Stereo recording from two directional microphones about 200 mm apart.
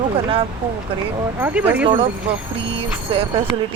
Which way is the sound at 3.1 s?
30° right (ahead or behind).